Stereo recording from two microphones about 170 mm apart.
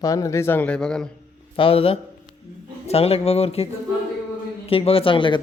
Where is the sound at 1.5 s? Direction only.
30° left (ahead or behind).